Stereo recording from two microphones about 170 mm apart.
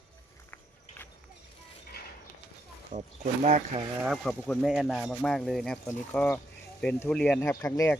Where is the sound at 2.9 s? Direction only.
40° right (ahead or behind).